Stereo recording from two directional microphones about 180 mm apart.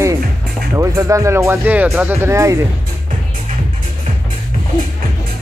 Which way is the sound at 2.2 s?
15° right (ahead or behind).